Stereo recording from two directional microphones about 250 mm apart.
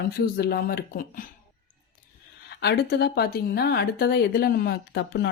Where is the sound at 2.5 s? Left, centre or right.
Left.